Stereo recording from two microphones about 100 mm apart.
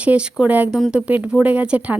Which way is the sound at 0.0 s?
10° right (ahead or behind).